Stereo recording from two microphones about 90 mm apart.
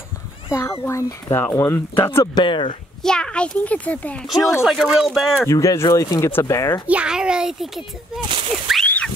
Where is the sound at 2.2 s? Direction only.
55° left (ahead or behind).